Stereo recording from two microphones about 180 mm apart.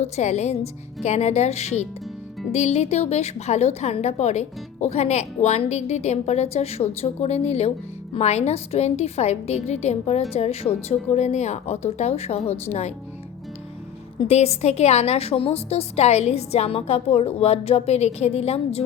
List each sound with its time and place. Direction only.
0.0 s a woman's voice: 40° left (ahead or behind)
14.2 s a woman's voice: 35° left (ahead or behind)